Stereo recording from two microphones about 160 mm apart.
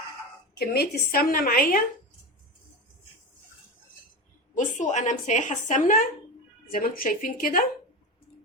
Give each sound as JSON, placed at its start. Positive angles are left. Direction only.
{"t": 0.6, "sound": "a woman's voice", "side_deg": 85}
{"t": 4.5, "sound": "a woman's voice", "side_deg": 50}